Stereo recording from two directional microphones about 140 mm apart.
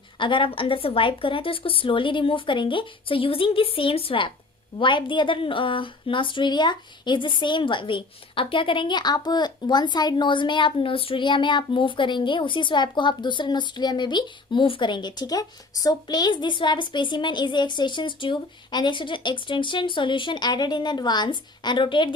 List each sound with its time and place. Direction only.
0.2 s speech: 35° left (ahead or behind)